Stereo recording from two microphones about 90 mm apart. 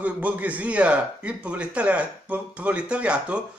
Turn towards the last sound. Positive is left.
turn(degrees=-15)  # may be behind; listen again after turning